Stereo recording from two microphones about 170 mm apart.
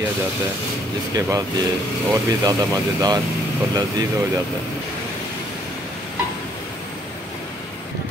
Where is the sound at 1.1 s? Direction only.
20° right (ahead or behind).